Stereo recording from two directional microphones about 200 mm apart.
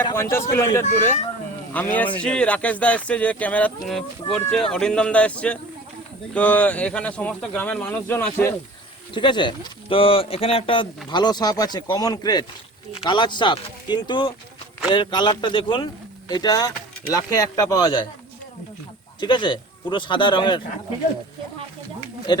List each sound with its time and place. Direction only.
0.1 s speech: 10° left (ahead or behind)
9.1 s speech: 25° left (ahead or behind)
19.2 s speech: 20° left (ahead or behind)
22.3 s speech: 20° left (ahead or behind)